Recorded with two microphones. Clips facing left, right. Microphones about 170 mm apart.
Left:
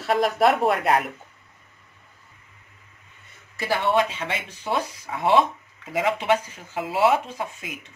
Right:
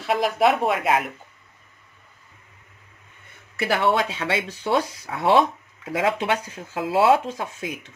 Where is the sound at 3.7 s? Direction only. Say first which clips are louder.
Even; 90° right.